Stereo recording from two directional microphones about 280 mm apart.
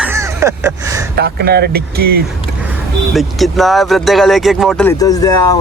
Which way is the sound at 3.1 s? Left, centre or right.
Centre.